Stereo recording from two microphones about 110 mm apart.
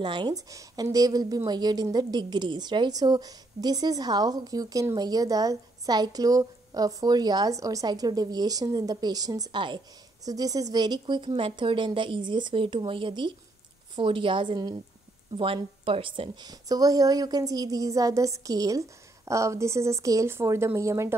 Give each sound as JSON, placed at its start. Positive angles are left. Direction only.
{"t": 0.0, "sound": "speech", "side_deg": -45}
{"t": 0.5, "sound": "a woman's voice", "side_deg": -30}
{"t": 10.2, "sound": "a woman's voice", "side_deg": -35}
{"t": 11.2, "sound": "speech", "side_deg": -55}
{"t": 15.3, "sound": "a woman's voice", "side_deg": -50}